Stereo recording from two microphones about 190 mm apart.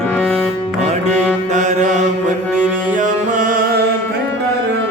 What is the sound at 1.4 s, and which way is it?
Mantra, 40° right (ahead or behind).